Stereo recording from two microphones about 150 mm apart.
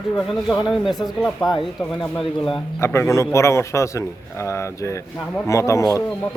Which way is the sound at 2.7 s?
20° left (ahead or behind).